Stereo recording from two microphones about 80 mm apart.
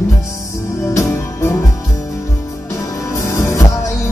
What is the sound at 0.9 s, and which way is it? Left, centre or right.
Music, left.